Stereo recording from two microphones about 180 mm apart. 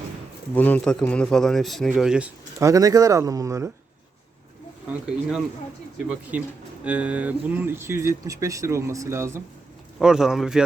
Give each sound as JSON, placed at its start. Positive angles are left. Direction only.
{"t": 0.5, "sound": "a man's voice", "side_deg": 10}
{"t": 2.6, "sound": "speech", "side_deg": -20}
{"t": 4.9, "sound": "a man's voice", "side_deg": -5}
{"t": 10.0, "sound": "a man's voice", "side_deg": -5}